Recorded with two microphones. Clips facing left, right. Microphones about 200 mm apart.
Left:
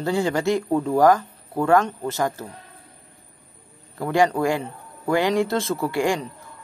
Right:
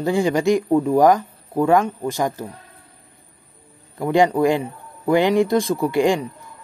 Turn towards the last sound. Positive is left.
turn(degrees=-20)  # may be behind; listen again after turning